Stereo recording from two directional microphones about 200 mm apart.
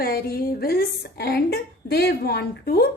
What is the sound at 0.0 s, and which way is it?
A woman's voice, 50° left (ahead or behind).